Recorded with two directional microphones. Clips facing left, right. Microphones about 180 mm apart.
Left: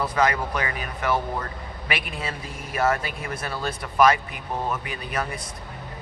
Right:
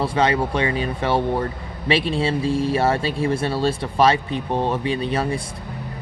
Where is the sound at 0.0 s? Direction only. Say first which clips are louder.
Right 4 dB; 30° right (ahead or behind).